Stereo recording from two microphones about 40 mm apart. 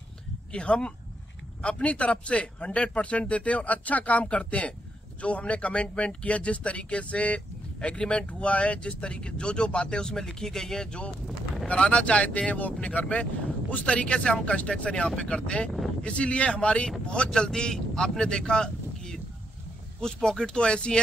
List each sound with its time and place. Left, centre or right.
0.5 s speech: left
11.6 s speech: left
17.3 s speech: centre